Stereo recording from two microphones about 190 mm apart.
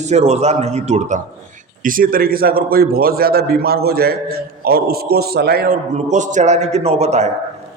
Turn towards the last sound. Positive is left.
turn(degrees=-35)  # may be behind; listen again after turning